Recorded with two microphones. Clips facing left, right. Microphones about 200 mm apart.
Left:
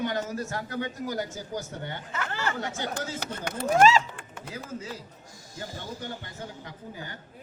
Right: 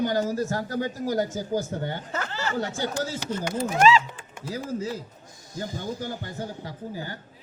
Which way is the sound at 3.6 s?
45° left (ahead or behind).